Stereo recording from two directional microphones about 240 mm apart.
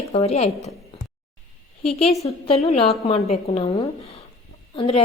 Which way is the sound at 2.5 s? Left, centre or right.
Left.